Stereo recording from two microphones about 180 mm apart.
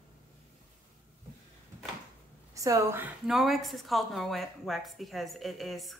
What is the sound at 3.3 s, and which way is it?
Speech, centre (ahead or behind).